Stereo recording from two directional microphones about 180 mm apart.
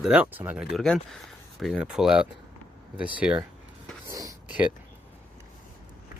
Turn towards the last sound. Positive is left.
turn(degrees=-15)  # may be behind; listen again after turning